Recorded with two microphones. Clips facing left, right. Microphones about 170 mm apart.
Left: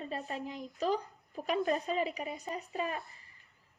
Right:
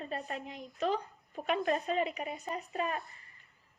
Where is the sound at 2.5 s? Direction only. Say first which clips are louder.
Right 2 dB; 40° right (ahead or behind).